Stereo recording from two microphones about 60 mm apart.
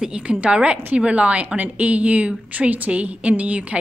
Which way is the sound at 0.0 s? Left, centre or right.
Centre.